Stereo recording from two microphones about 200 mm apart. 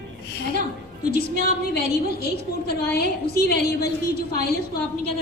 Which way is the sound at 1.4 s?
50° left (ahead or behind).